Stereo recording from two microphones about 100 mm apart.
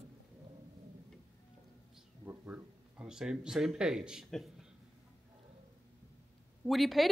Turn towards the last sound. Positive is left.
turn(degrees=0)  # may be behind; listen again after turning